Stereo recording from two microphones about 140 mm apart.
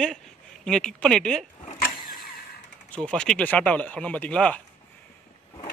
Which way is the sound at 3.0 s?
5° left (ahead or behind).